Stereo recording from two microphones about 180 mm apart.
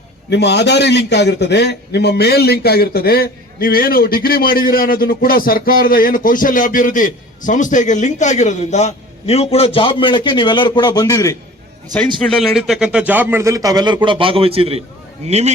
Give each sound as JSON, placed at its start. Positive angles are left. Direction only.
{"t": 0.3, "sound": "a man's voice", "side_deg": 70}
{"t": 12.2, "sound": "a man's voice", "side_deg": 0}